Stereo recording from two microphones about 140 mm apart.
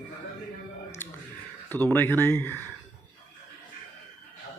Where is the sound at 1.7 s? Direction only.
15° left (ahead or behind).